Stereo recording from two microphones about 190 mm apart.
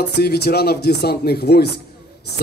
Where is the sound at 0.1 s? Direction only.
60° left (ahead or behind).